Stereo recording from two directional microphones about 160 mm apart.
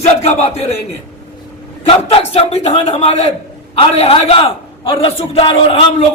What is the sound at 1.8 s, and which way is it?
A man's voice, 35° left (ahead or behind).